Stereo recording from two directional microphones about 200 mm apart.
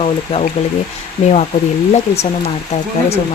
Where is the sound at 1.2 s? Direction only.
35° left (ahead or behind).